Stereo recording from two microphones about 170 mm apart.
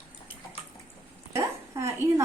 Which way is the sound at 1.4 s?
15° right (ahead or behind).